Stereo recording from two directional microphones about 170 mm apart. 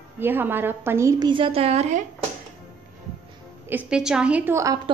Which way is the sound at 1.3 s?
35° right (ahead or behind).